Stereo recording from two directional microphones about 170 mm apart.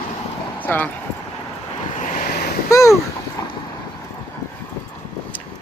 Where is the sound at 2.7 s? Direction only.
20° left (ahead or behind).